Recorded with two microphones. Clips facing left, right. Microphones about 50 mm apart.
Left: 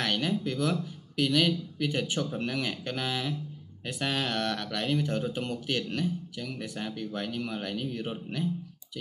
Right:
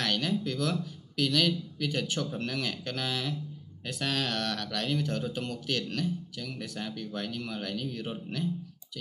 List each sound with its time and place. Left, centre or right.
0.0 s speech: centre